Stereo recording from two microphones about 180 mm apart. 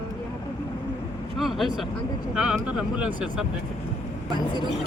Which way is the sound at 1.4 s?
Centre (ahead or behind).